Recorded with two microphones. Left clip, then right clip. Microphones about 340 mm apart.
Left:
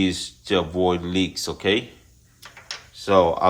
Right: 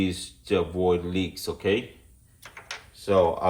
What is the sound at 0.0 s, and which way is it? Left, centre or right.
Speech, centre.